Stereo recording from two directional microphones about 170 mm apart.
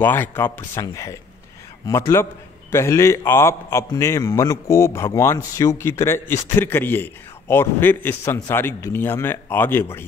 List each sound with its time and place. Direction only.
0.0 s a man's voice: 10° left (ahead or behind)